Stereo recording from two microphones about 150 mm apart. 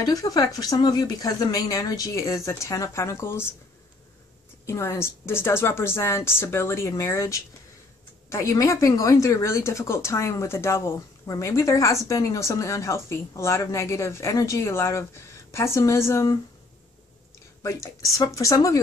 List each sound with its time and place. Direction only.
0.0 s speech: 25° left (ahead or behind)
4.6 s a woman's voice: 20° left (ahead or behind)
17.6 s speech: 20° left (ahead or behind)